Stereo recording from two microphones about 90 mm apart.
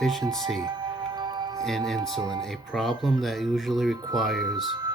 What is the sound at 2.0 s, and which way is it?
Speech, 40° right (ahead or behind).